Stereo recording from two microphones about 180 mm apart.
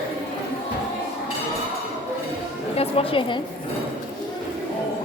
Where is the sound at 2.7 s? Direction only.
35° left (ahead or behind).